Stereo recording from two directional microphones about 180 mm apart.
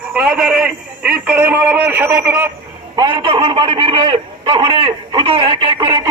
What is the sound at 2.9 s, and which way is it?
A man's voice, 25° right (ahead or behind).